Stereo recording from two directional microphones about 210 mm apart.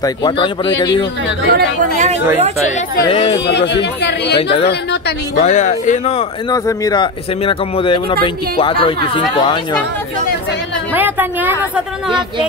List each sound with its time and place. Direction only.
0.0 s speech: 20° left (ahead or behind)
1.5 s speech: 35° right (ahead or behind)
3.0 s speech: 25° left (ahead or behind)
3.4 s speech: 55° left (ahead or behind)
5.4 s speech: 35° left (ahead or behind)
6.5 s speech: 20° left (ahead or behind)
11.0 s a sound: 10° right (ahead or behind)